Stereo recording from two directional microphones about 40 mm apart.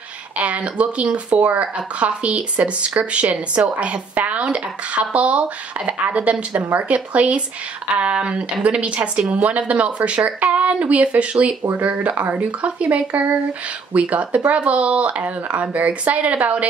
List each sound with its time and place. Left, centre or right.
0.4 s a woman's voice: right